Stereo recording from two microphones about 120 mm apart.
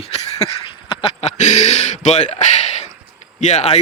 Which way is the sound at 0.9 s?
55° left (ahead or behind).